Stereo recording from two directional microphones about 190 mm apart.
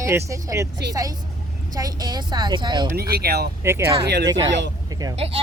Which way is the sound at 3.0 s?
55° right (ahead or behind).